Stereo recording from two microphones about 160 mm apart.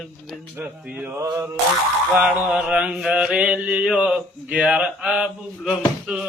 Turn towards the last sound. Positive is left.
turn(degrees=-5)  # may be behind; listen again after turning